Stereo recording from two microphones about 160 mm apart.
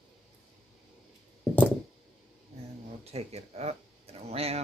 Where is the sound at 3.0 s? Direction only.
40° right (ahead or behind).